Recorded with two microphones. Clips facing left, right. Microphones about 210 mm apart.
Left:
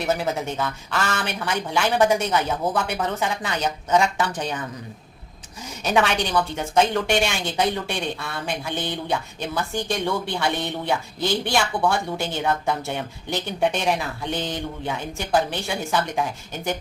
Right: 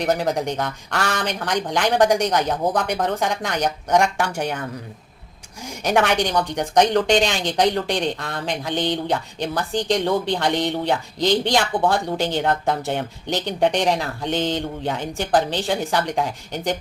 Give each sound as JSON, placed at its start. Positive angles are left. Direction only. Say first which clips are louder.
{"t": 0.1, "sound": "speech", "louder": "right 2 dB", "side_deg": -15}
{"t": 5.6, "sound": "speech", "louder": "right 2 dB", "side_deg": -15}